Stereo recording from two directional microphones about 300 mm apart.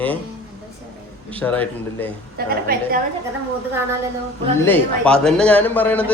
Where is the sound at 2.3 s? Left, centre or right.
Right.